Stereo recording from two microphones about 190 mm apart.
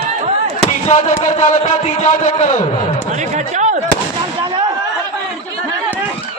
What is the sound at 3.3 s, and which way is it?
Speech, 40° right (ahead or behind).